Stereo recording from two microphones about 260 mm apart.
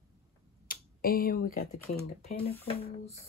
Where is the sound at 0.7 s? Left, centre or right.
Left.